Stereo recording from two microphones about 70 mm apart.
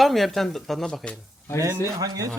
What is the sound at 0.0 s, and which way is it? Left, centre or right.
Speech, centre.